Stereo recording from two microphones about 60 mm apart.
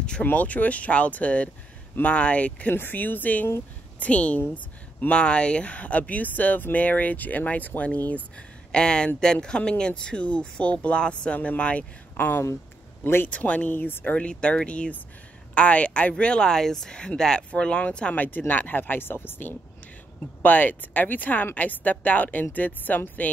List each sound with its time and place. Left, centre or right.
0.2 s speech: left
2.7 s speech: left
14.1 s speech: centre
18.1 s speech: left